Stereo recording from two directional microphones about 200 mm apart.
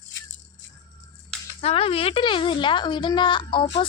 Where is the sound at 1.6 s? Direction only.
30° left (ahead or behind).